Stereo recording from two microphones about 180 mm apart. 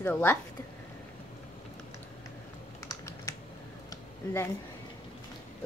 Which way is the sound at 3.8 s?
15° left (ahead or behind).